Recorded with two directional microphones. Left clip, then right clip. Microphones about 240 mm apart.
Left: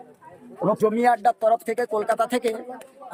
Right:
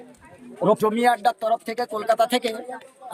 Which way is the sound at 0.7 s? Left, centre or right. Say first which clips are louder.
Even; centre.